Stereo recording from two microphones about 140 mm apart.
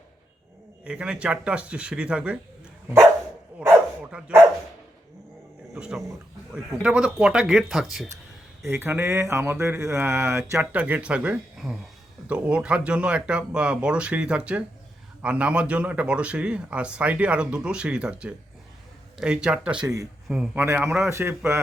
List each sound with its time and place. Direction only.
0.9 s speech: 5° right (ahead or behind)
3.6 s dog: 10° right (ahead or behind)
4.1 s speech: 15° right (ahead or behind)
5.7 s dog: 5° right (ahead or behind)
6.5 s speech: 5° right (ahead or behind)
8.6 s a man's voice: 15° right (ahead or behind)
20.6 s speech: 20° right (ahead or behind)